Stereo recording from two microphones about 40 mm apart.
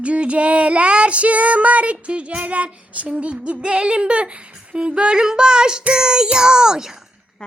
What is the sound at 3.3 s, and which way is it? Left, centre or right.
Speech, right.